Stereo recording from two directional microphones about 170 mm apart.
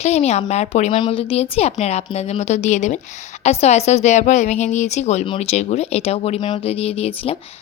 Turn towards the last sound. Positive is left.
turn(degrees=35)  # may be behind; listen again after turning